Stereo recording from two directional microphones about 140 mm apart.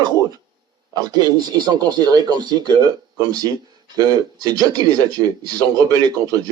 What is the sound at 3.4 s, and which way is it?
Speech, 30° right (ahead or behind).